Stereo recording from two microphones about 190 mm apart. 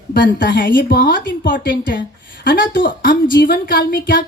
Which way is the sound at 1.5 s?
50° left (ahead or behind).